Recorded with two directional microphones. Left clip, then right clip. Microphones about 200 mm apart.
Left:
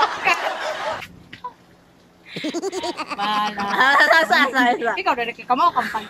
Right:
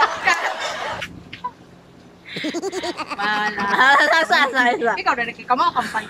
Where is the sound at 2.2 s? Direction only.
15° left (ahead or behind).